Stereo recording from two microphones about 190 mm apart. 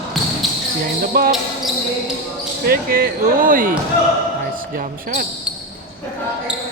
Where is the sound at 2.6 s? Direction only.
50° right (ahead or behind).